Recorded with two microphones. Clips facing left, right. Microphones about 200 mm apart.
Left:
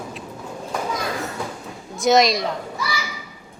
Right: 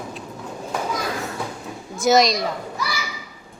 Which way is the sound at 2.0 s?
Centre (ahead or behind).